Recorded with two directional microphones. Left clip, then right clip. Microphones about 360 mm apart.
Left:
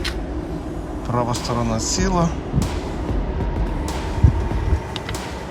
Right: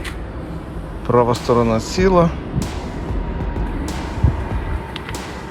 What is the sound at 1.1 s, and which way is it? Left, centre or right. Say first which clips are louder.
Speech: right 8 dB; centre.